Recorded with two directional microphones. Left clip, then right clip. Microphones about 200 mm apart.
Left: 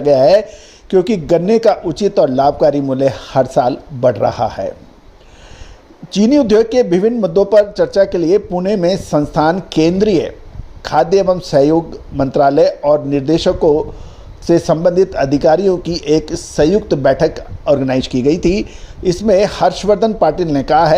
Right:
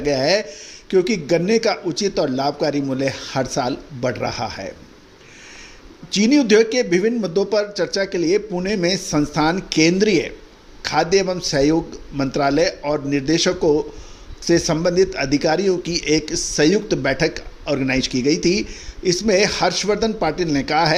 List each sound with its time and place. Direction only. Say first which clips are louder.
0.0 s speech: left 9 dB; 30° left (ahead or behind)
6.1 s a man's voice: left 4 dB; 30° left (ahead or behind)